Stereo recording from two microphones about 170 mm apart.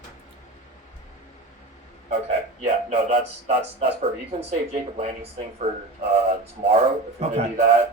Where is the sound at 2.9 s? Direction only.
45° right (ahead or behind).